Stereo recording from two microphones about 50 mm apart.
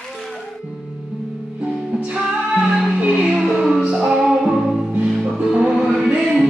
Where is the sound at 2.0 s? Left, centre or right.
Centre.